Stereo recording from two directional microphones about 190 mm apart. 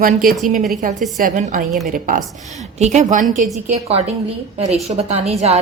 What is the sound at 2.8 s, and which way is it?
A woman's voice, 35° right (ahead or behind).